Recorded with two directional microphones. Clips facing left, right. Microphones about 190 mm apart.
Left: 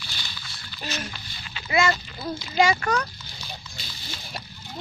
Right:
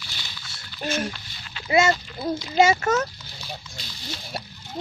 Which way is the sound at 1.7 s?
25° right (ahead or behind).